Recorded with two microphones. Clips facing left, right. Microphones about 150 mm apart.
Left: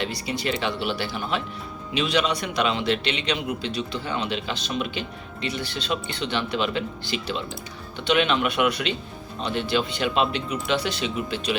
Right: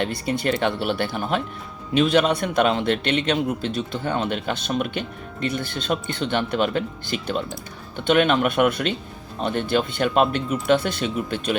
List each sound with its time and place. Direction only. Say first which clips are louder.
0.0 s a man's voice: right 4 dB; 50° right (ahead or behind)